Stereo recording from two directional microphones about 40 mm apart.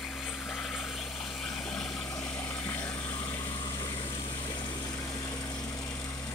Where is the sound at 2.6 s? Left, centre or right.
Left.